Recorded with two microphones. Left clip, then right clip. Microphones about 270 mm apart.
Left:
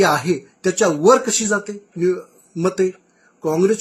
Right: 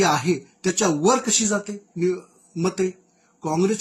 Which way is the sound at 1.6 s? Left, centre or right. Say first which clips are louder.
Left 3 dB; left.